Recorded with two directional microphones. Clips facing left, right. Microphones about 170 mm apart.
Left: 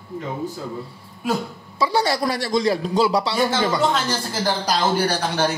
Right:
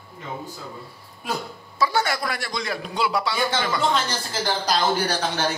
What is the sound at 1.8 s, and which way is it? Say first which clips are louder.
Speech: left 3 dB; 35° left (ahead or behind).